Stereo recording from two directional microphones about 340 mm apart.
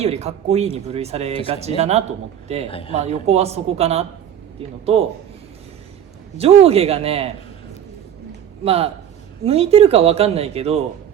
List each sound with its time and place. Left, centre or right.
0.0 s speech: centre
2.6 s a woman's voice: centre
2.9 s a man's voice: centre
6.3 s a man's voice: centre
8.6 s a man's voice: centre